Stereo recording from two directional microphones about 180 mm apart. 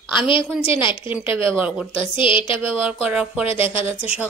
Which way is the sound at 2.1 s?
30° left (ahead or behind).